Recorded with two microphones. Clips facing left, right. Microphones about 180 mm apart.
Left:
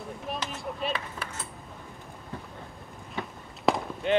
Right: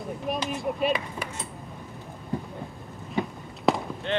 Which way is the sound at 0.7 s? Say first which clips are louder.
Right 4 dB; 15° right (ahead or behind).